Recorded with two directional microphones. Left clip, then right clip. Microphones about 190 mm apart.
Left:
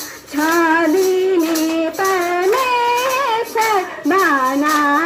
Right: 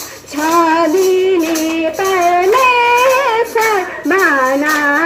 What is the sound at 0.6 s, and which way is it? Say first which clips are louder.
Child singing: right 3 dB; 25° left (ahead or behind).